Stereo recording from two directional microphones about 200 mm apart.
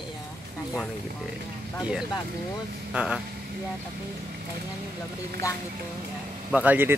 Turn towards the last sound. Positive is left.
turn(degrees=-10)  # may be behind; listen again after turning